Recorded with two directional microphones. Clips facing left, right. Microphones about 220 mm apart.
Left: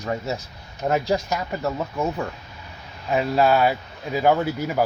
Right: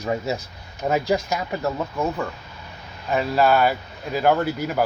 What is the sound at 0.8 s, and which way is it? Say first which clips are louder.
Speech: right 1 dB; centre (ahead or behind).